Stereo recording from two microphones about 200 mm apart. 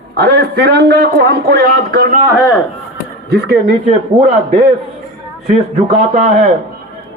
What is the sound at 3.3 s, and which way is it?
Speech, 55° right (ahead or behind).